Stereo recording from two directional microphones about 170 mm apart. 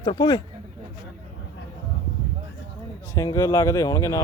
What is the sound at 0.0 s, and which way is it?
Speech, 25° left (ahead or behind).